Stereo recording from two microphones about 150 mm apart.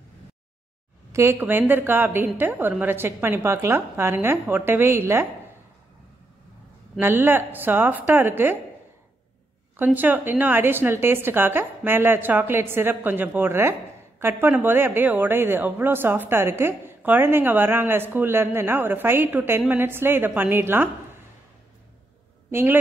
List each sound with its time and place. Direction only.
1.1 s a woman's voice: 20° right (ahead or behind)
7.0 s a woman's voice: 15° right (ahead or behind)
9.8 s a woman's voice: 10° right (ahead or behind)
22.5 s a woman's voice: 15° right (ahead or behind)